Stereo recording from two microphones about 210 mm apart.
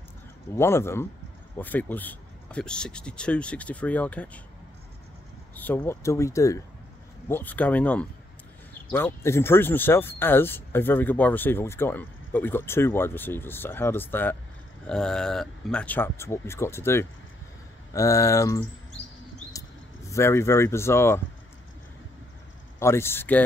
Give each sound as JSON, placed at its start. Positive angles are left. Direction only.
{"t": 0.6, "sound": "speech", "side_deg": 10}
{"t": 5.6, "sound": "speech", "side_deg": 10}
{"t": 20.1, "sound": "speech", "side_deg": 10}
{"t": 22.8, "sound": "speech", "side_deg": 10}